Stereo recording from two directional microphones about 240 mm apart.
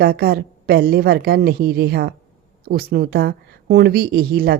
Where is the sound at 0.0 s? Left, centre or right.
Right.